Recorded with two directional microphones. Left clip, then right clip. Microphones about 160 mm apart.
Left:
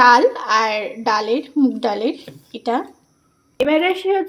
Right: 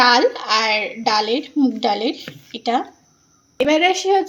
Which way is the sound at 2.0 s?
10° left (ahead or behind).